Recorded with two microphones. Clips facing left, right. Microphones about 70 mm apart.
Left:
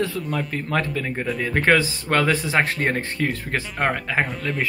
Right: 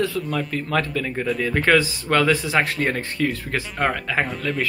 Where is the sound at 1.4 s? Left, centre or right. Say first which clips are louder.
Left 1 dB; left.